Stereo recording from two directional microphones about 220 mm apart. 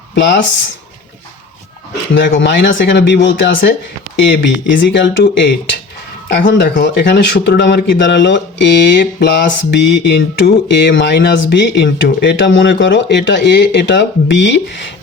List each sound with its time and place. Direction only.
0.1 s speech: 50° left (ahead or behind)
2.1 s speech: 55° left (ahead or behind)